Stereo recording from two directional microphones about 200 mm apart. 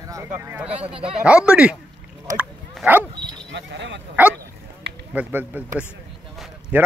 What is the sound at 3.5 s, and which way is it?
Speech, 60° right (ahead or behind).